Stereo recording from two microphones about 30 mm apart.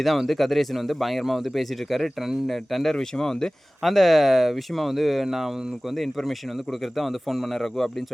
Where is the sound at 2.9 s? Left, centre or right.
Centre.